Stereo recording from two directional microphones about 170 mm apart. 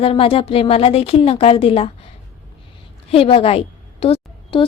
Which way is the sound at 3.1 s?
35° left (ahead or behind).